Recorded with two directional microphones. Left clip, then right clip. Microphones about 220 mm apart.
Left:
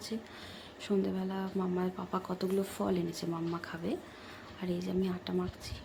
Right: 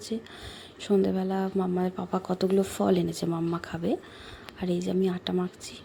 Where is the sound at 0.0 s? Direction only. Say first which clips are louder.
Right 6 dB; 25° right (ahead or behind).